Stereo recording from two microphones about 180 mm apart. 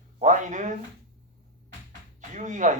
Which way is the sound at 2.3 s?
45° right (ahead or behind).